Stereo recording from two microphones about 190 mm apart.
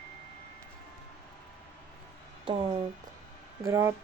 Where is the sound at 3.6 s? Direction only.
15° right (ahead or behind).